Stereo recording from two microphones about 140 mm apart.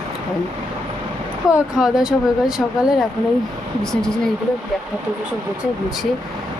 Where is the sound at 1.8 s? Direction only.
5° right (ahead or behind).